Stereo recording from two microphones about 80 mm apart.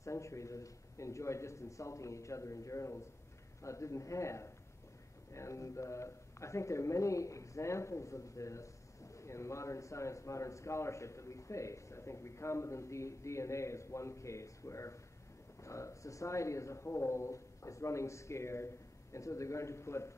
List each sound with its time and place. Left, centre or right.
0.0 s a man's voice: left